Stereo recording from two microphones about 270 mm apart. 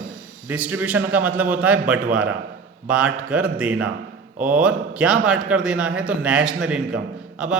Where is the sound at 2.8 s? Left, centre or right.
Centre.